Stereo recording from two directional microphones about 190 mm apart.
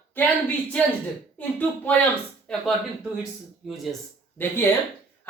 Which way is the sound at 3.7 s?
Centre (ahead or behind).